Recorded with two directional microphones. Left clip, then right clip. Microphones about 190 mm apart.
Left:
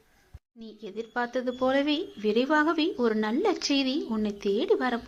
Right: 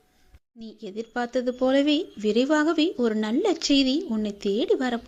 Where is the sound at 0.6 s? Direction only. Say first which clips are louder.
Right 2 dB; 45° right (ahead or behind).